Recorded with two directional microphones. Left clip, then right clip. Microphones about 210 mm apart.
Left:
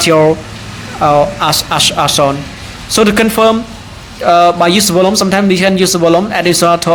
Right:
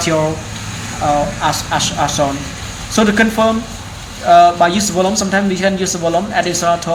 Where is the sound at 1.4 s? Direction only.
40° left (ahead or behind).